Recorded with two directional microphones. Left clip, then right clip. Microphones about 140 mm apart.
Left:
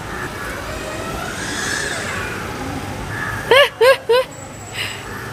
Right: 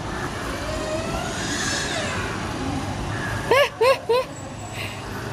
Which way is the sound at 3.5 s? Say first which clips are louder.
Left 6 dB; centre (ahead or behind).